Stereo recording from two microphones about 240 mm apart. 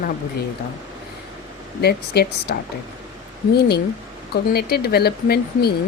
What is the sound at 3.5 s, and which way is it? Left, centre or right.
Speech, left.